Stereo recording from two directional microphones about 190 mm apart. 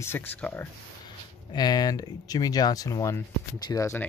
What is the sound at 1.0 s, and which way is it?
Speech, 20° left (ahead or behind).